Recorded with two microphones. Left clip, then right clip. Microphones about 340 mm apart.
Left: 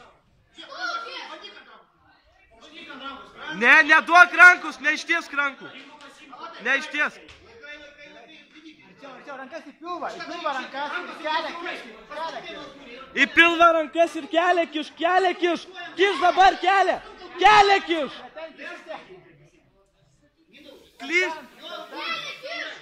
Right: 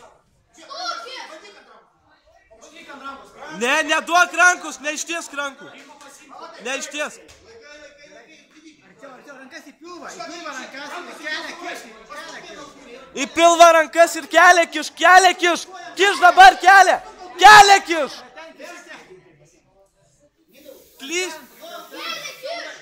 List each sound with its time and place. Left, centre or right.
3.5 s a man's voice: centre
6.6 s a man's voice: centre
10.4 s a man's voice: centre
13.1 s a man's voice: centre; by 18.2 s right
21.0 s speech: centre